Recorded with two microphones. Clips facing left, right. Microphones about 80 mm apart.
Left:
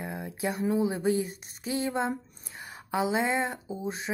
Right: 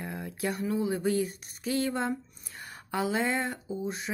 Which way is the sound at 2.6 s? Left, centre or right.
Centre.